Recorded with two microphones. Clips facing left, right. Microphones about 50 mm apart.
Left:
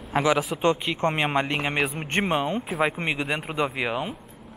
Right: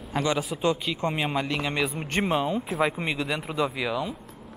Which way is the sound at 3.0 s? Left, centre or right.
Left.